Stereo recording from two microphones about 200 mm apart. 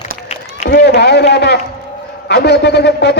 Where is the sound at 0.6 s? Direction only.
55° left (ahead or behind).